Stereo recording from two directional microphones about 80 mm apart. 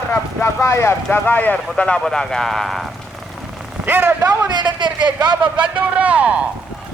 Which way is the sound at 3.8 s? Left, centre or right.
Right.